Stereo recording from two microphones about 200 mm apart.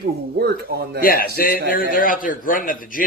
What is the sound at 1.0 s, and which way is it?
A man's voice, 50° left (ahead or behind).